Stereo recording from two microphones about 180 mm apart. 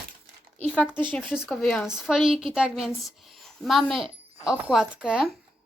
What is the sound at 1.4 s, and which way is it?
Speech, 5° left (ahead or behind).